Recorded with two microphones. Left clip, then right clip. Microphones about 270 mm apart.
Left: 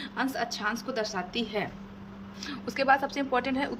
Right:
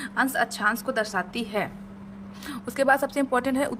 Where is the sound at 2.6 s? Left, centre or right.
Right.